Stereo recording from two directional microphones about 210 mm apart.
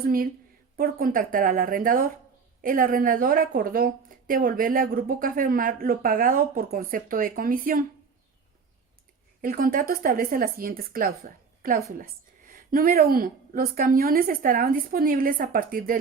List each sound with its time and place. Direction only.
0.0 s a woman's voice: 45° right (ahead or behind)
9.4 s a woman's voice: 45° right (ahead or behind)